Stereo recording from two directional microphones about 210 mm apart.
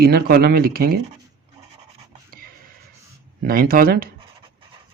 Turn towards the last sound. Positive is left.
turn(degrees=-45)  # may be behind; listen again after turning